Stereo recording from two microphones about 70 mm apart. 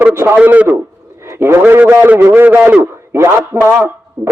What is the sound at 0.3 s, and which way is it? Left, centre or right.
Speech, right.